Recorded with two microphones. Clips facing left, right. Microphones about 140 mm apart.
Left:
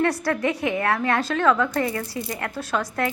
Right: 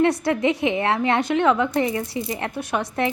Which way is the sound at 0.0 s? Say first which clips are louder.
Right 3 dB; 20° right (ahead or behind).